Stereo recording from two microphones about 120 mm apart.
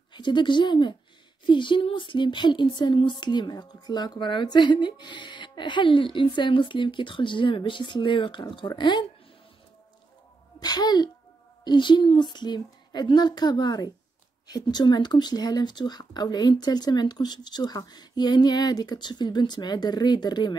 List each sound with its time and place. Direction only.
0.1 s speech: 40° left (ahead or behind)
10.6 s speech: 35° left (ahead or behind)